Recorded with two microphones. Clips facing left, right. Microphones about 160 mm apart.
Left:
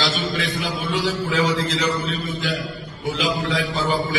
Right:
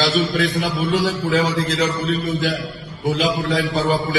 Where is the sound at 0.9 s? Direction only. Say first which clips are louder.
Right 3 dB; 40° right (ahead or behind).